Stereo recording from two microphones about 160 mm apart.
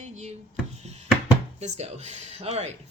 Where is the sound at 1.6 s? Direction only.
45° right (ahead or behind).